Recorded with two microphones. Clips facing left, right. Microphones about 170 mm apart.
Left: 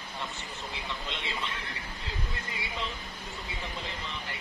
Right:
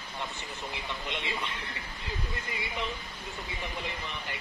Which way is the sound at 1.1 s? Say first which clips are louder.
Right 2 dB; 15° right (ahead or behind).